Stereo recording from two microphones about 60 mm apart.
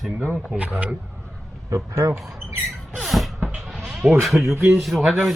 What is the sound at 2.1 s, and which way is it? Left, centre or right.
Speech, centre.